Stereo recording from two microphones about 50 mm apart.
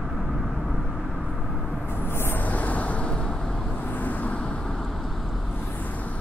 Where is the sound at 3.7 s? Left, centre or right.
Left.